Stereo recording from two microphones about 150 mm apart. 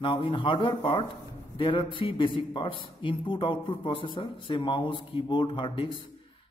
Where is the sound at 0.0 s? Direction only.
35° left (ahead or behind).